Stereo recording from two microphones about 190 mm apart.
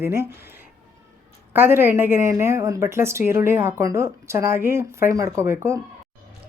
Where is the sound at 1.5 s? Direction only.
10° right (ahead or behind).